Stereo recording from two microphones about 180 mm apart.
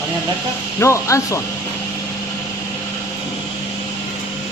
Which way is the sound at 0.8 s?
15° left (ahead or behind).